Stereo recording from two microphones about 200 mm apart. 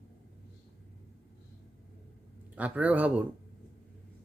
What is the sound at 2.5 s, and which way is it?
Speech, 5° right (ahead or behind).